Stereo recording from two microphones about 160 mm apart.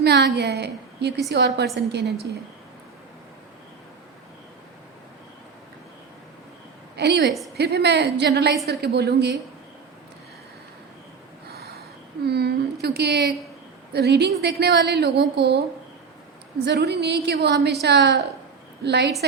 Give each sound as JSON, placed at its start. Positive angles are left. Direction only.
{"t": 0.0, "sound": "a woman's voice", "side_deg": -90}
{"t": 6.9, "sound": "a woman's voice", "side_deg": -90}
{"t": 12.3, "sound": "a woman's voice", "side_deg": -90}
{"t": 16.6, "sound": "a woman's voice", "side_deg": -90}